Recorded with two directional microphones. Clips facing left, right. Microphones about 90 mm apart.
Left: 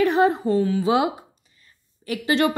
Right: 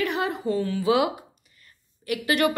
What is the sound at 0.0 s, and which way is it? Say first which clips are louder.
A woman's voice: left 8 dB; 35° left (ahead or behind).